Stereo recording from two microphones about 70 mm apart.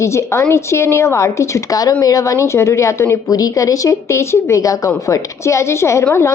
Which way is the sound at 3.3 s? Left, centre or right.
Left.